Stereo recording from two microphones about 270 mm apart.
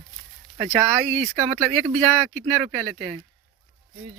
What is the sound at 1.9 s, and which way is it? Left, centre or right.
Speech, right.